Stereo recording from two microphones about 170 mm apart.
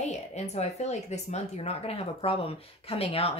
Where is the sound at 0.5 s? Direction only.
40° left (ahead or behind).